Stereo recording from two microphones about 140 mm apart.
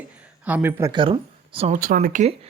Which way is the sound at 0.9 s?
35° right (ahead or behind).